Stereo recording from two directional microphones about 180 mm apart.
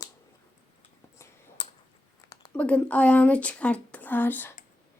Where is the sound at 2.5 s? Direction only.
5° left (ahead or behind).